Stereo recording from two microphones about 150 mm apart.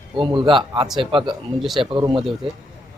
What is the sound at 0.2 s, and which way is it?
Speech, 30° right (ahead or behind).